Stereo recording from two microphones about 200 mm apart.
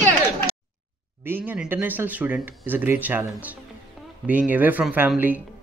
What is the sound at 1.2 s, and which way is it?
Speech, 10° right (ahead or behind).